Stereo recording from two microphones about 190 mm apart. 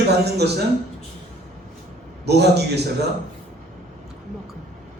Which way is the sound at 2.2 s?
60° right (ahead or behind).